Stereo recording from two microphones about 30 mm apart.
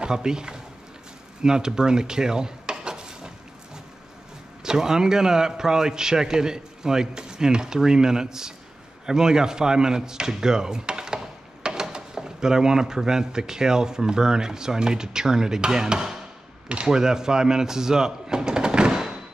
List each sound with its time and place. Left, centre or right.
0.0 s speech: right
1.4 s dishes: right
4.6 s speech: centre
10.9 s wood: right
11.6 s speech: right